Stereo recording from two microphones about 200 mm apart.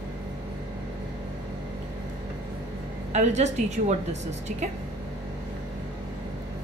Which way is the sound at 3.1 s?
35° right (ahead or behind).